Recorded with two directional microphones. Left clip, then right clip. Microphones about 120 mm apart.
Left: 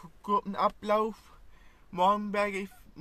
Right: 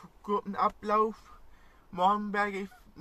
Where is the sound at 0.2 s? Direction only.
25° left (ahead or behind).